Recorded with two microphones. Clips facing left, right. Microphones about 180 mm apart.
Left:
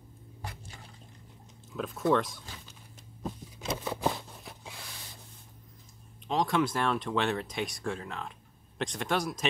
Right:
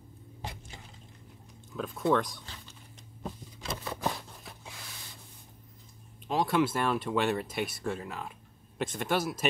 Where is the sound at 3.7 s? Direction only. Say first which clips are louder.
Left 3 dB; 15° left (ahead or behind).